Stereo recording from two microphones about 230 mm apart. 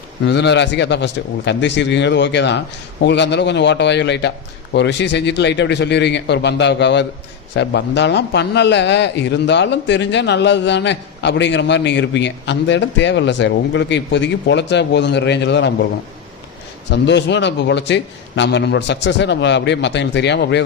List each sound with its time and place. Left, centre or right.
0.3 s a man's voice: left
16.9 s a man's voice: left